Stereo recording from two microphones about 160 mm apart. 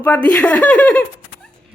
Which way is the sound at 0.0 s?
10° left (ahead or behind).